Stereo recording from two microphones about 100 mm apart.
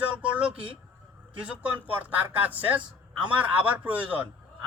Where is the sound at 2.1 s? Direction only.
15° right (ahead or behind).